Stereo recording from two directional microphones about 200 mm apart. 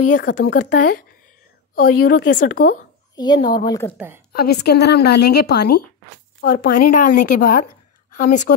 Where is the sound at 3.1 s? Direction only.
20° left (ahead or behind).